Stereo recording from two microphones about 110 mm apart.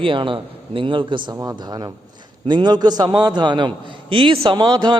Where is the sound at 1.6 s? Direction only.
35° right (ahead or behind).